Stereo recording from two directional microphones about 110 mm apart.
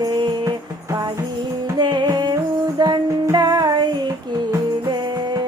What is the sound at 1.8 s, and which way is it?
Music, 40° right (ahead or behind).